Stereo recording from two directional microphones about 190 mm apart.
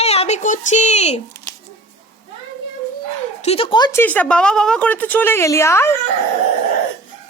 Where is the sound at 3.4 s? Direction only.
30° left (ahead or behind); by 5.9 s 15° left (ahead or behind).